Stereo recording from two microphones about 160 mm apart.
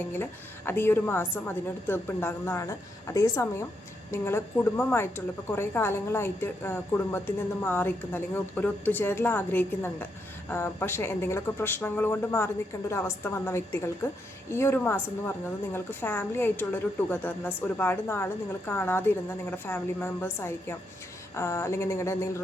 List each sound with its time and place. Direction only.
0.2 s a woman's voice: 15° left (ahead or behind)